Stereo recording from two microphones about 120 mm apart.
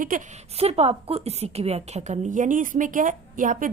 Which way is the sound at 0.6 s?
55° right (ahead or behind).